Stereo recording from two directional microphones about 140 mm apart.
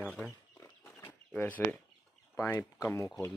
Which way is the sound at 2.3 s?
20° left (ahead or behind).